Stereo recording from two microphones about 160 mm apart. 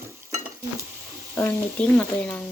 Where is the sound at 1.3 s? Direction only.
10° left (ahead or behind).